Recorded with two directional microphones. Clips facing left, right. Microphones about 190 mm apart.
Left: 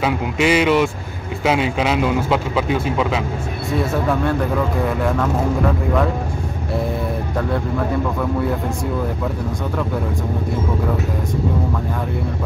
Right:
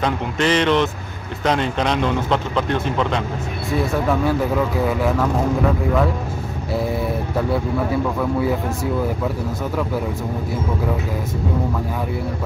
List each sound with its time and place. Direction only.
0.0 s speech: 10° left (ahead or behind)
7.3 s speech: 5° right (ahead or behind)